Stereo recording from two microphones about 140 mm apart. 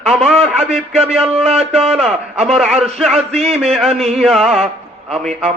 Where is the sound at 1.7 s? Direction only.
45° right (ahead or behind).